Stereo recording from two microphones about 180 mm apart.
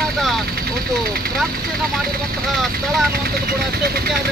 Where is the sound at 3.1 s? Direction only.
55° right (ahead or behind).